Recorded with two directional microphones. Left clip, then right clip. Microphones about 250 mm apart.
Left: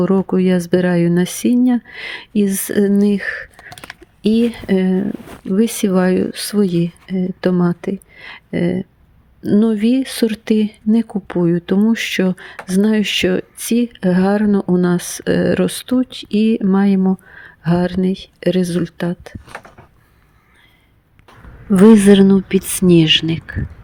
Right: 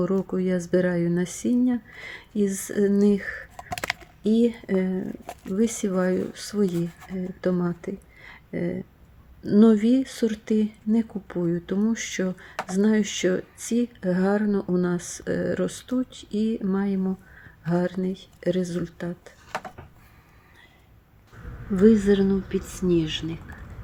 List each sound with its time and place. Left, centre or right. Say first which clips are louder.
0.0 s speech: left 9 dB; left
21.7 s speech: left 9 dB; left